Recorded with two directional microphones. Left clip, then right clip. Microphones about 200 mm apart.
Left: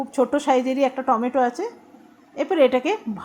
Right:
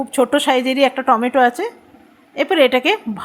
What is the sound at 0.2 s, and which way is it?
A woman's voice, 20° right (ahead or behind).